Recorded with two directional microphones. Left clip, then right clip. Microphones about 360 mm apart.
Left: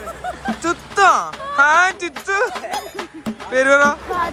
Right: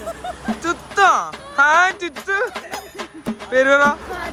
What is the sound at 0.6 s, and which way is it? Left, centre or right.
Speech, centre.